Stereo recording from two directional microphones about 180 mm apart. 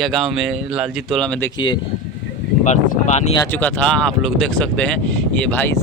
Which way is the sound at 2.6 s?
40° left (ahead or behind).